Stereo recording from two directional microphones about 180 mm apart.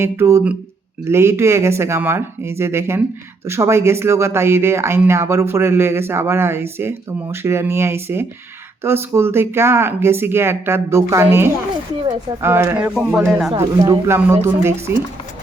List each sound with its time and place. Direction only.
0.0 s speech: 15° right (ahead or behind)
13.6 s speech: 20° right (ahead or behind)